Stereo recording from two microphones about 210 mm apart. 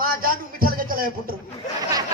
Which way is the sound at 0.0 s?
45° right (ahead or behind).